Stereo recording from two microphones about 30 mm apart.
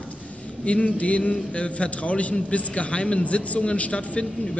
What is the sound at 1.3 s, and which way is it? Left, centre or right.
A man's voice, left.